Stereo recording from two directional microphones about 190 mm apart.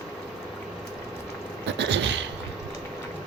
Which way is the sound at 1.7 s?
65° right (ahead or behind).